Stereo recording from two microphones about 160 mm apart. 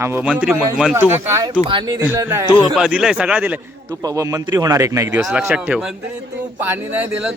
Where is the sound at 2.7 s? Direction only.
5° right (ahead or behind).